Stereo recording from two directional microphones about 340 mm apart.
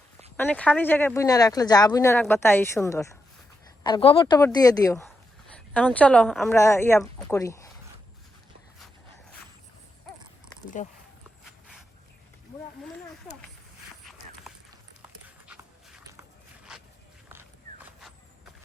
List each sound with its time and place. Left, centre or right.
0.3 s a woman's voice: centre
10.8 s speech: centre
15.4 s dog: centre
16.7 s walk: centre